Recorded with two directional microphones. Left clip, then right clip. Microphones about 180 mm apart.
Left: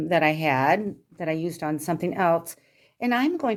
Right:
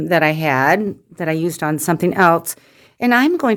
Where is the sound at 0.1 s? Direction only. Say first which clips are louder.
Right 6 dB; 35° right (ahead or behind).